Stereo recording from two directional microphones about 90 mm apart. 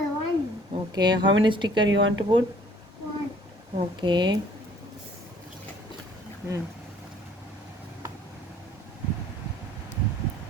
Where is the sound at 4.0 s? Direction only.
60° right (ahead or behind).